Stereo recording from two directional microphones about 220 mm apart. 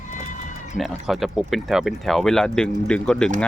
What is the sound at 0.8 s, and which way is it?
Speech, centre (ahead or behind).